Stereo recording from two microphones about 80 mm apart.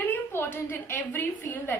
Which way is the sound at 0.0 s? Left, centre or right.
Left.